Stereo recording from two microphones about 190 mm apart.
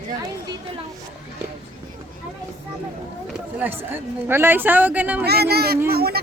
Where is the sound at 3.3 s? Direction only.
10° right (ahead or behind).